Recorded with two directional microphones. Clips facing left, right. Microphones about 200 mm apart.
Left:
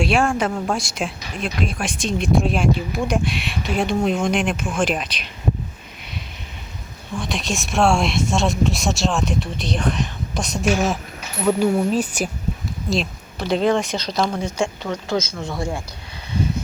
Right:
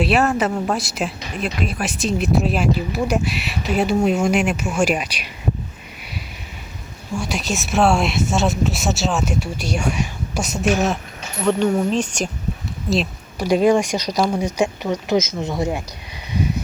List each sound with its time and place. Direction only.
0.0 s speech: 5° right (ahead or behind)
7.1 s speech: 10° right (ahead or behind); by 12.3 s 5° left (ahead or behind)
12.9 s a sound: centre (ahead or behind)
13.5 s speech: 15° right (ahead or behind)